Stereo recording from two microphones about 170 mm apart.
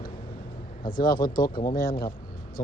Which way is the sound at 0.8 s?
55° left (ahead or behind).